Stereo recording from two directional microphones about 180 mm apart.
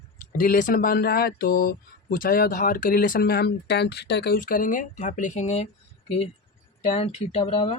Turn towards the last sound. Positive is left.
turn(degrees=30)  # may be behind; listen again after turning